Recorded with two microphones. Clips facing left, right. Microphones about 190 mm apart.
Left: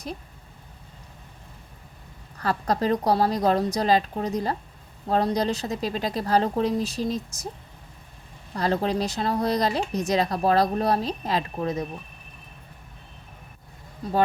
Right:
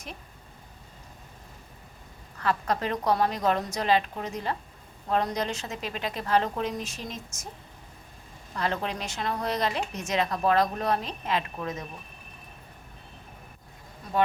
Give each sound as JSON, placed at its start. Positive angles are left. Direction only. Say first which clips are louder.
{"t": 2.4, "sound": "speech", "louder": "left 3 dB", "side_deg": 35}
{"t": 8.5, "sound": "speech", "louder": "left 6 dB", "side_deg": 35}